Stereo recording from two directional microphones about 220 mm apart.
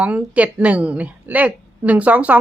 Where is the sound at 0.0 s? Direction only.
5° right (ahead or behind).